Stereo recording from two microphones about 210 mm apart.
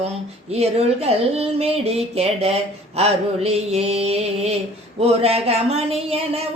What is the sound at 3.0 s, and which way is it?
Mantra, 30° right (ahead or behind).